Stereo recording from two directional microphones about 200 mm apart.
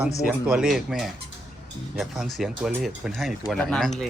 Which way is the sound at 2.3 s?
Centre (ahead or behind).